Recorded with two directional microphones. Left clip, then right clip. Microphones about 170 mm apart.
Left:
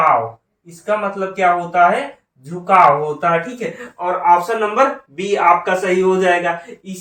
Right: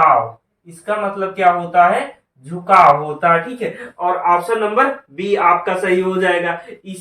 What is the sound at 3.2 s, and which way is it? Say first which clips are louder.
Speech: right 2 dB; 20° left (ahead or behind).